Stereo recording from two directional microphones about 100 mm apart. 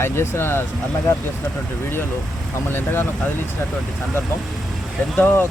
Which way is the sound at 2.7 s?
25° left (ahead or behind).